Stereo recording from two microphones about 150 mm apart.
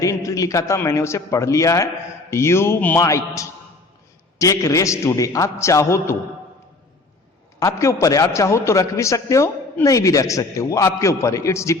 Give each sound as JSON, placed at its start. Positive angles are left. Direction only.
{"t": 0.0, "sound": "a man's voice", "side_deg": 20}
{"t": 7.6, "sound": "a man's voice", "side_deg": 20}